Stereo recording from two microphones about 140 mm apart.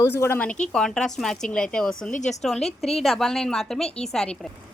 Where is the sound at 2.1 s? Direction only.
55° left (ahead or behind).